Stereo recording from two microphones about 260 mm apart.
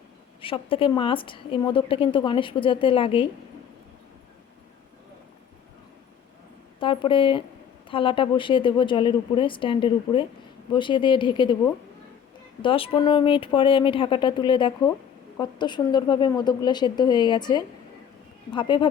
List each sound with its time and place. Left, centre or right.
0.4 s a woman's voice: left
6.7 s a woman's voice: centre
12.6 s a woman's voice: centre